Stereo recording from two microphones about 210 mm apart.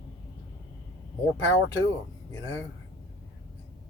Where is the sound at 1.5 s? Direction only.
60° left (ahead or behind).